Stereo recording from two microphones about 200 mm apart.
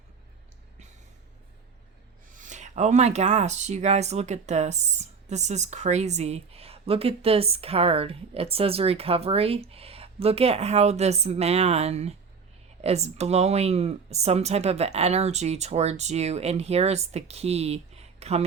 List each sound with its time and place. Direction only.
2.4 s speech: 35° right (ahead or behind)